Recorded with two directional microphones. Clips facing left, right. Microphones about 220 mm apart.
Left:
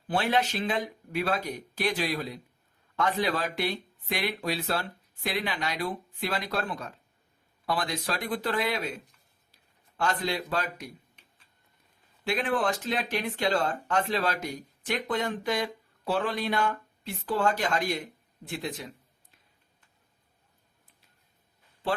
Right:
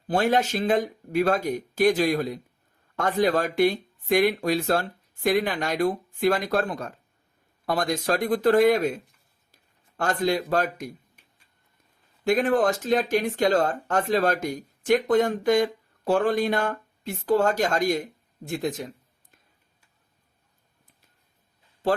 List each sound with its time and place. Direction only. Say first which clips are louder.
0.1 s speech: right 5 dB; 45° right (ahead or behind)
10.0 s speech: right 5 dB; 45° right (ahead or behind)
12.2 s speech: right 7 dB; 45° right (ahead or behind)